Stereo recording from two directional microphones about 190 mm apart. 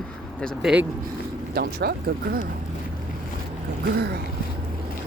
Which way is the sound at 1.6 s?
55° right (ahead or behind).